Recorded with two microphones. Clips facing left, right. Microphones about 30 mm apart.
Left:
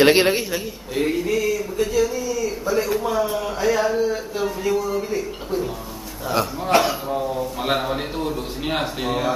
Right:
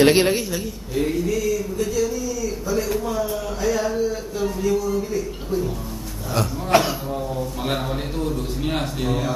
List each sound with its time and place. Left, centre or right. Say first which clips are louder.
0.0 s a man's voice: left 1 dB; centre
3.0 s a sound: left 3 dB; left
6.7 s a man's voice: even; centre